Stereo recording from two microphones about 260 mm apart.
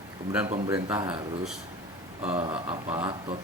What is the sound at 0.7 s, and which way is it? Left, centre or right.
A man's voice, centre.